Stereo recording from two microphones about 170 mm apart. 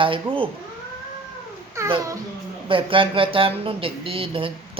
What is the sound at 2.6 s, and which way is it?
Speech, 30° right (ahead or behind).